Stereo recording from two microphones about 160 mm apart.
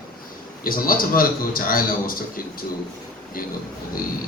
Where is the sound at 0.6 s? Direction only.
65° left (ahead or behind).